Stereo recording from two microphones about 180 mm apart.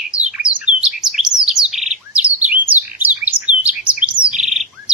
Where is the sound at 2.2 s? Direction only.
10° right (ahead or behind).